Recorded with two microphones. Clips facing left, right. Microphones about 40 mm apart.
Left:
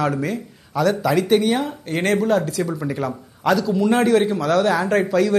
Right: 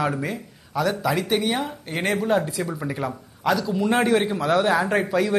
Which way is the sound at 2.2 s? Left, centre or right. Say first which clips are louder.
Left 3 dB; centre.